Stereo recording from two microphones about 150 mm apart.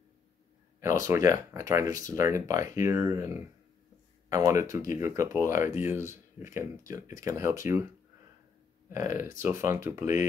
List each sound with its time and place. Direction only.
0.7 s speech: 20° right (ahead or behind)
4.5 s speech: 20° right (ahead or behind)
8.9 s speech: 15° right (ahead or behind)